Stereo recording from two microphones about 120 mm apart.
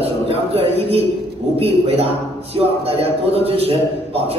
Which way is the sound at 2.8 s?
55° right (ahead or behind).